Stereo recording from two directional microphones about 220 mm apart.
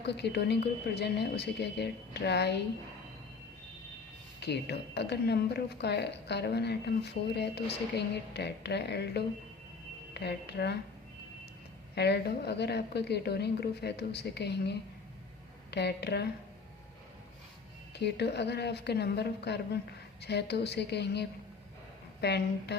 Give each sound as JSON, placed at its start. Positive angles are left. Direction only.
{"t": 0.0, "sound": "a woman's voice", "side_deg": 50}
{"t": 4.4, "sound": "a woman's voice", "side_deg": 50}
{"t": 11.9, "sound": "a woman's voice", "side_deg": 50}
{"t": 17.9, "sound": "a woman's voice", "side_deg": 50}